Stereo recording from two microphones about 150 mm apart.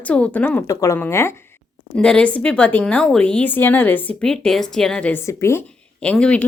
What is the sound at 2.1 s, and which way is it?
A woman's voice, 5° left (ahead or behind).